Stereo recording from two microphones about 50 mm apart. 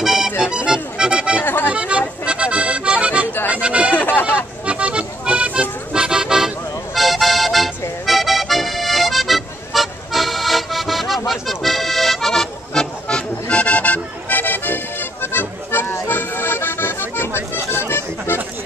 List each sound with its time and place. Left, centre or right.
0.0 s music: centre
1.4 s accordion: left
1.7 s accordion: right
3.5 s a sound: right
3.9 s a sound: left
4.6 s accordion: right
5.9 s music: centre
7.0 s music: centre
8.1 s accordion: centre; by 18.4 s left